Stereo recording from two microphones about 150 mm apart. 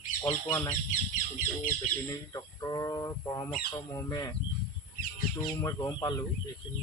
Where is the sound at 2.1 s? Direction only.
25° left (ahead or behind).